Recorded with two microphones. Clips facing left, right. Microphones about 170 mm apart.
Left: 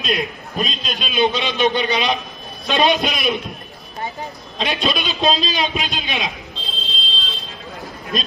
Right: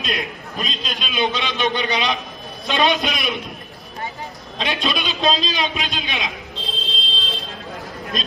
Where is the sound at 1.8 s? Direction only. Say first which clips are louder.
Left 2 dB; 20° right (ahead or behind).